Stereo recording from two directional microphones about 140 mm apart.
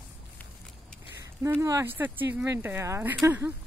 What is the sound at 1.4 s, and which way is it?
Speech, 20° right (ahead or behind).